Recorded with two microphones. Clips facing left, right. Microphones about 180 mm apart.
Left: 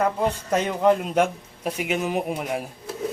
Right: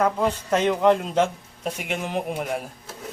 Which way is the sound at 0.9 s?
10° left (ahead or behind).